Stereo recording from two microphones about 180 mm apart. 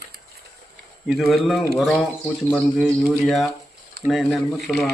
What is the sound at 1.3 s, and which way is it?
Speech, centre (ahead or behind).